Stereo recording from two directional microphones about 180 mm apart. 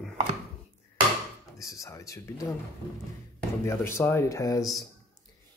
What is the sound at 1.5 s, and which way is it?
Speech, 15° left (ahead or behind).